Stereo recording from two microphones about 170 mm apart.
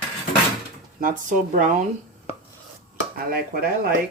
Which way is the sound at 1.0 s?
50° right (ahead or behind).